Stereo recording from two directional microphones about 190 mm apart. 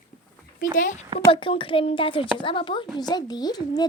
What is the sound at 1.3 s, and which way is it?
A child's voice, 25° left (ahead or behind).